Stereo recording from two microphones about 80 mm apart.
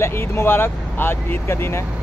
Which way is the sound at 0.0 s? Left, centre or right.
Left.